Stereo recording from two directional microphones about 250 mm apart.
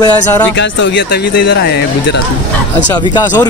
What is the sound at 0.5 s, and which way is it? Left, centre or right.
Speech, left.